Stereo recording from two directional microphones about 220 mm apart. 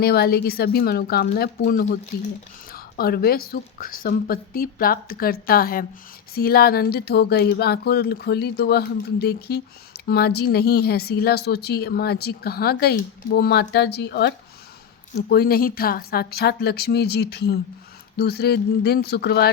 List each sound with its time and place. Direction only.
0.0 s speech: 45° left (ahead or behind)